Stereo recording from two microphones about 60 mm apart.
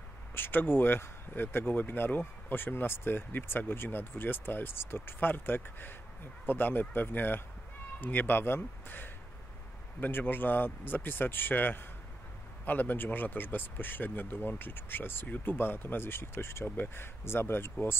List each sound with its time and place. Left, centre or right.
0.3 s speech: left